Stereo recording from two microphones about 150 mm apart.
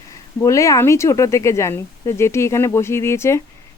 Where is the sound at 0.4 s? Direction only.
20° left (ahead or behind).